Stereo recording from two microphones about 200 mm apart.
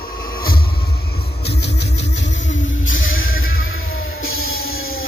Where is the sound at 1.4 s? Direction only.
55° left (ahead or behind); by 5.0 s 90° left.